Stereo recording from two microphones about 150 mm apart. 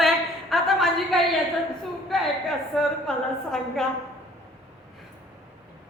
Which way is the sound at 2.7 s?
5° left (ahead or behind).